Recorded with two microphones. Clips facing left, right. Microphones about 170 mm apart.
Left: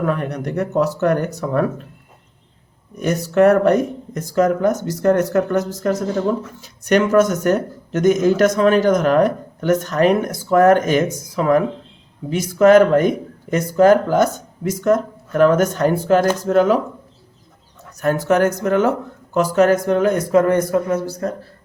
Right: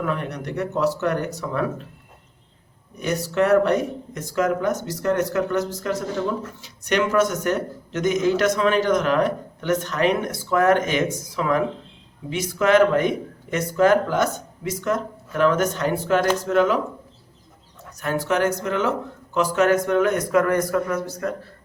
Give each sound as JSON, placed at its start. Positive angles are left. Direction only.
{"t": 0.0, "sound": "speech", "side_deg": 50}
{"t": 3.0, "sound": "speech", "side_deg": 45}
{"t": 18.0, "sound": "speech", "side_deg": 45}